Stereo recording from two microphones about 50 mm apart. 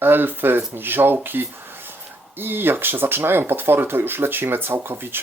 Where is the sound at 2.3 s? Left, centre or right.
Right.